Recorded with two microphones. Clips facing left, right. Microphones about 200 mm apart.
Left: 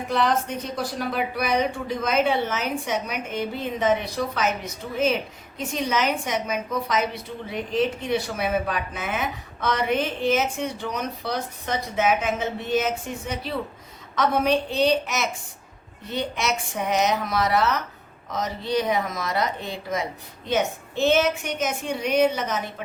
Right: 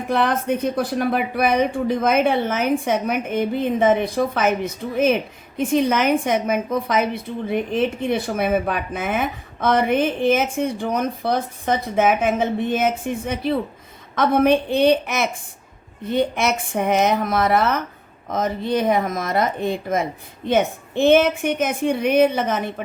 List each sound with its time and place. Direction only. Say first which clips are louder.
0.1 s a woman's voice: right 4 dB; 55° right (ahead or behind)